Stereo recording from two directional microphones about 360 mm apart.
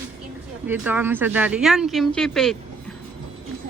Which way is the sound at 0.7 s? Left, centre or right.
Centre.